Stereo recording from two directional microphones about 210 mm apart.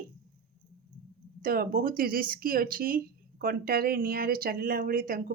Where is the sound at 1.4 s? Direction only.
45° right (ahead or behind).